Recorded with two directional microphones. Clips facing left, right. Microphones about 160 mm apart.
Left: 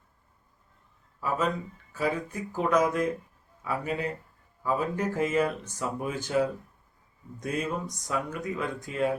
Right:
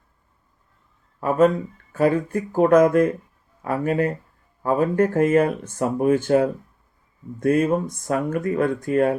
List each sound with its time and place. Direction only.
1.2 s speech: 50° right (ahead or behind)